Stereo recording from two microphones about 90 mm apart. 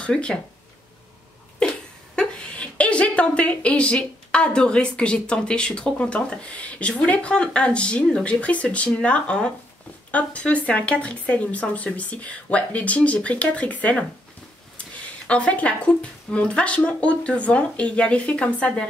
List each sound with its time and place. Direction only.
0.0 s a woman's voice: 10° left (ahead or behind)
1.6 s a sound: 10° left (ahead or behind)
2.1 s a woman's voice: 10° left (ahead or behind)
15.2 s a woman's voice: 15° left (ahead or behind)